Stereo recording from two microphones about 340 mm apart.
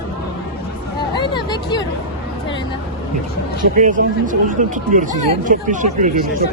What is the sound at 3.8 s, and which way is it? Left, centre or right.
A man's voice, right.